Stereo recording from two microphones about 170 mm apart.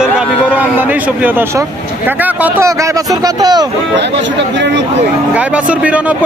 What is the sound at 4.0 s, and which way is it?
Speech, 90° right.